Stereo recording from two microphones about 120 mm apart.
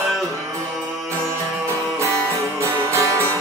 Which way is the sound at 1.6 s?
25° right (ahead or behind).